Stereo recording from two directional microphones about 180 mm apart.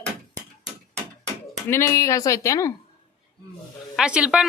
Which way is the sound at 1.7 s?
15° left (ahead or behind).